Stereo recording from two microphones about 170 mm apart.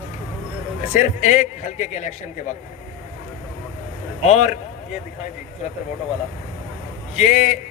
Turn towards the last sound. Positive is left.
turn(degrees=40)  # may be behind; listen again after turning